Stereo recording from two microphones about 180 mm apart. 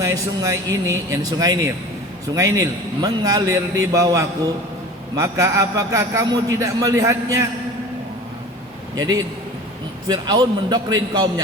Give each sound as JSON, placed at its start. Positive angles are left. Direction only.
{"t": 0.0, "sound": "a man's voice", "side_deg": -15}
{"t": 9.0, "sound": "a man's voice", "side_deg": -20}